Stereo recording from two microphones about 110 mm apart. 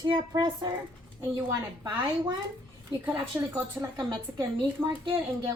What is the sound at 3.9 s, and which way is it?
Speech, 45° right (ahead or behind).